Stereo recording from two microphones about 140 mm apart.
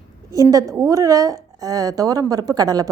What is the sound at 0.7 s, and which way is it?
A woman's voice, 25° right (ahead or behind).